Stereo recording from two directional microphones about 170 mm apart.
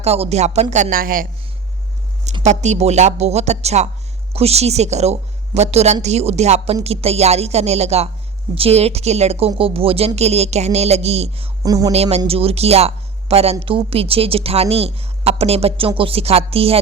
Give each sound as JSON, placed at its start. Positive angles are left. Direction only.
{"t": 0.0, "sound": "speech", "side_deg": -40}
{"t": 2.4, "sound": "speech", "side_deg": -45}
{"t": 11.6, "sound": "speech", "side_deg": -20}
{"t": 11.9, "sound": "speech", "side_deg": -40}